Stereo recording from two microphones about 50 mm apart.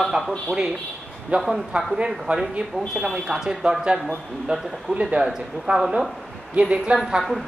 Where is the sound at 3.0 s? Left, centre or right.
Centre.